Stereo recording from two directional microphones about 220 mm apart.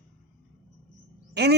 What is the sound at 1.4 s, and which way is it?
Speech, 50° right (ahead or behind).